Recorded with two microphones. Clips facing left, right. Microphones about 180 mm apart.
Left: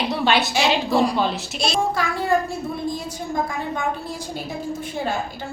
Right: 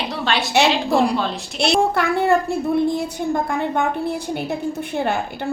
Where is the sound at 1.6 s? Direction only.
65° right (ahead or behind).